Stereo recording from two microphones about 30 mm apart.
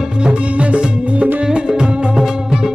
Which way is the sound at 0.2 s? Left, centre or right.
Right.